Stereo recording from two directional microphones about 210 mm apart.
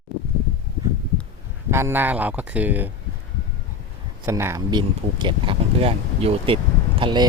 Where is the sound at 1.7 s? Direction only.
10° right (ahead or behind).